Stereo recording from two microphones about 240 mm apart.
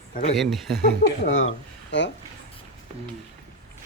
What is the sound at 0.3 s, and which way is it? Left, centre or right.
Speech, centre.